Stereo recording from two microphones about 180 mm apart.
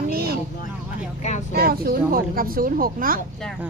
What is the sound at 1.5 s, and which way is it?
Speech, 60° right (ahead or behind).